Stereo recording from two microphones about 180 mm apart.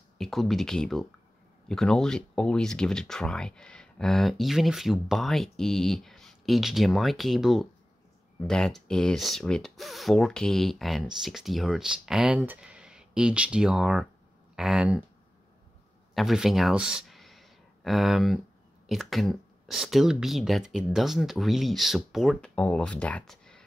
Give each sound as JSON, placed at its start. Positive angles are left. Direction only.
{"t": 0.2, "sound": "speech", "side_deg": 0}
{"t": 16.2, "sound": "speech", "side_deg": 0}